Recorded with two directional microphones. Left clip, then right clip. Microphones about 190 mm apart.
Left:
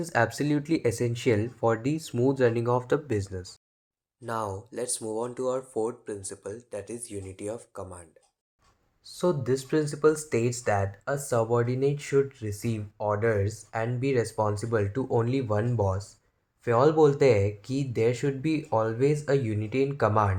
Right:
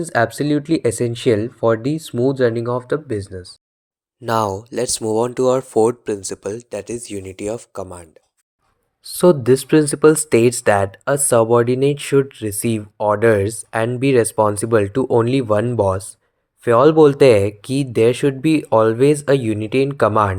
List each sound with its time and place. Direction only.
0.0 s speech: 25° right (ahead or behind)
4.3 s speech: 45° right (ahead or behind)